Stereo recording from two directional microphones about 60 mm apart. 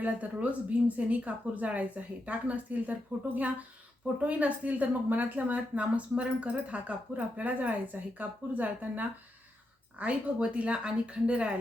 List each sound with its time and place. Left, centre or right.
0.0 s a woman's voice: right